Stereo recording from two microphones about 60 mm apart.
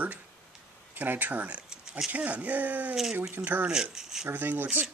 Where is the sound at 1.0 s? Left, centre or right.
Right.